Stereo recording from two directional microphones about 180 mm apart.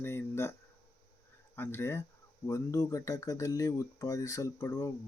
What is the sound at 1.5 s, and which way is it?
Speech, 15° left (ahead or behind).